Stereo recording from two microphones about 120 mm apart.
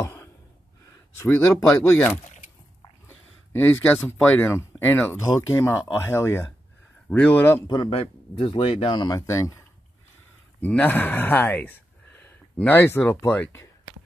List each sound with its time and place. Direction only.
0.0 s a sound: 25° left (ahead or behind)
1.2 s speech: 20° left (ahead or behind)
7.6 s speech: 45° left (ahead or behind)
8.8 s speech: 35° left (ahead or behind)
9.2 s speech: 25° left (ahead or behind)
10.6 s speech: 15° left (ahead or behind)